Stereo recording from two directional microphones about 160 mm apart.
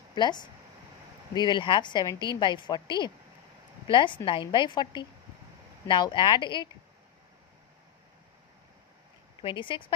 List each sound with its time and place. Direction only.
0.1 s a woman's voice: 25° left (ahead or behind)
9.4 s a woman's voice: 30° left (ahead or behind)